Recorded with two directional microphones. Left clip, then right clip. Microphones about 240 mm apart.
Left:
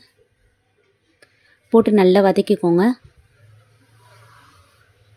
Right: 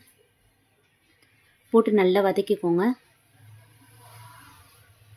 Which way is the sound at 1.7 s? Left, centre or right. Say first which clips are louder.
Left 6 dB; centre.